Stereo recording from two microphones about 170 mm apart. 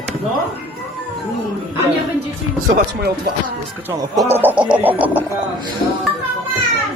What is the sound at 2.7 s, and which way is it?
Speech, 65° right (ahead or behind).